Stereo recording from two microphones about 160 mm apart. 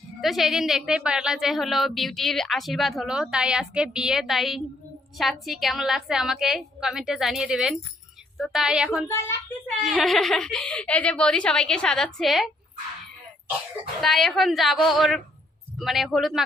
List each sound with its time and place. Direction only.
0.2 s a woman's voice: centre (ahead or behind)
9.0 s a child's voice: 15° left (ahead or behind)
9.8 s a woman's voice: centre (ahead or behind)
14.0 s a woman's voice: centre (ahead or behind)